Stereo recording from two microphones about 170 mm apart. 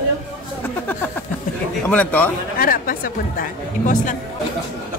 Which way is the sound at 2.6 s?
55° left (ahead or behind).